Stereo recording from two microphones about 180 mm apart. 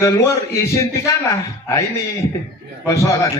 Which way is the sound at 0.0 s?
15° left (ahead or behind).